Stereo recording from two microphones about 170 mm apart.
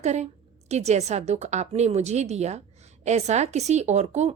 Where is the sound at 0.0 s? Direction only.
40° right (ahead or behind).